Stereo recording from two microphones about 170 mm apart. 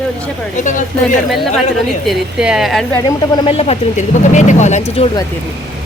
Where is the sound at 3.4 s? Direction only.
35° left (ahead or behind).